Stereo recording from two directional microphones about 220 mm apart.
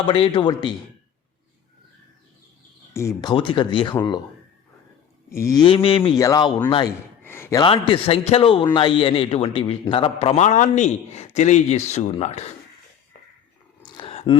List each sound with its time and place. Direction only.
0.0 s a man's voice: 25° left (ahead or behind)
2.9 s a man's voice: 15° left (ahead or behind)
5.3 s a man's voice: 15° left (ahead or behind)
7.2 s a sound: 10° left (ahead or behind)
7.6 s a man's voice: 25° left (ahead or behind)
13.8 s a sound: 20° left (ahead or behind)